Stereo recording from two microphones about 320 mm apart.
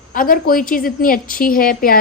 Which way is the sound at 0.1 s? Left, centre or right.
Left.